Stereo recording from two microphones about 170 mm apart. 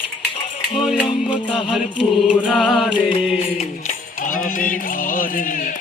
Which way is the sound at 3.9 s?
50° left (ahead or behind).